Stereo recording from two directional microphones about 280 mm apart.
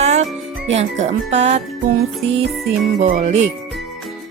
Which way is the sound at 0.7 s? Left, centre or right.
Right.